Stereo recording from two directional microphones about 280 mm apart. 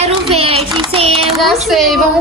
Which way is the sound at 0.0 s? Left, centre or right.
Right.